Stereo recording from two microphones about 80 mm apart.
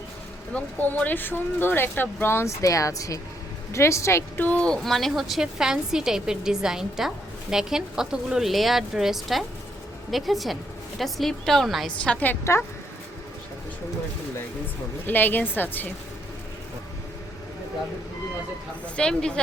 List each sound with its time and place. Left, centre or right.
0.5 s a woman's voice: centre; by 4.2 s left
4.4 s speech: centre
4.8 s a woman's voice: centre
12.0 s speech: centre
15.0 s speech: left
18.9 s speech: centre